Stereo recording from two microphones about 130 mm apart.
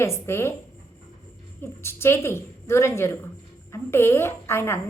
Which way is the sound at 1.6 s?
20° left (ahead or behind).